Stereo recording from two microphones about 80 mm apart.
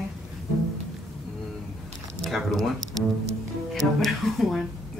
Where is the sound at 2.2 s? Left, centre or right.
Centre.